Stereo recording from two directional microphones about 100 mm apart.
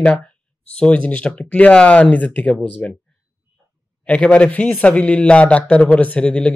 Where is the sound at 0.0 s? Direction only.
10° left (ahead or behind).